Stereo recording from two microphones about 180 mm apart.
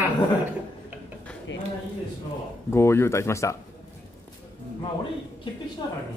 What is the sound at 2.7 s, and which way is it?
Speech, 15° left (ahead or behind).